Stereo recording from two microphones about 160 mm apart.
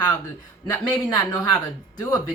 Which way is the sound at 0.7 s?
10° left (ahead or behind).